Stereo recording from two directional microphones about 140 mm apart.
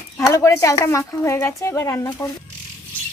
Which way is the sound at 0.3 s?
20° left (ahead or behind).